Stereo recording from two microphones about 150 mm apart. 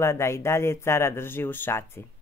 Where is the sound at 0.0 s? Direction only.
20° left (ahead or behind).